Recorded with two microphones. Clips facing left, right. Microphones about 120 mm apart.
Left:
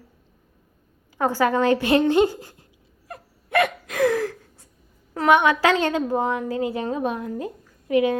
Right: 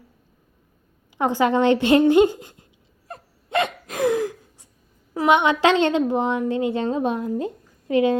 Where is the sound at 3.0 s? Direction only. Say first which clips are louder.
Even; 25° right (ahead or behind).